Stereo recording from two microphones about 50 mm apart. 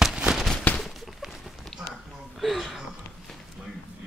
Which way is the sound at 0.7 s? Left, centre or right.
Left.